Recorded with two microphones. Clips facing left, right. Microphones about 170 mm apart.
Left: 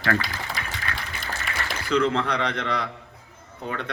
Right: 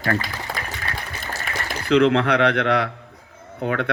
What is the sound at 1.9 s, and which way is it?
A man's voice, 70° right (ahead or behind).